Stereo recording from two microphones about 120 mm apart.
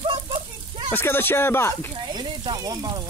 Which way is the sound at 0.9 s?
20° left (ahead or behind).